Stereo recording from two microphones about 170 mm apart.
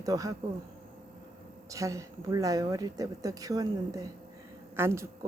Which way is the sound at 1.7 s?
20° right (ahead or behind).